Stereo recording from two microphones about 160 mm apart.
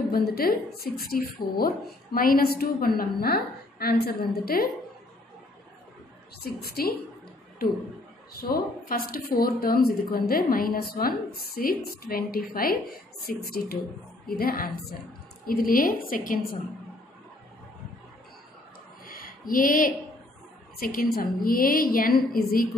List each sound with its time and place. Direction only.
0.1 s a woman's voice: 70° left (ahead or behind)
6.6 s a woman's voice: 75° left (ahead or behind)
8.4 s a woman's voice: 70° left (ahead or behind)
19.0 s a sound: 60° left (ahead or behind)
20.7 s a woman's voice: 65° left (ahead or behind)